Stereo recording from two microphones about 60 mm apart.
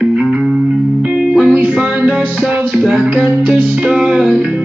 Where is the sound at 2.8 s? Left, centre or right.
Centre.